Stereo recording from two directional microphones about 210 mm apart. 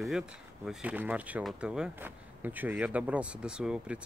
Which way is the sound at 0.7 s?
5° right (ahead or behind).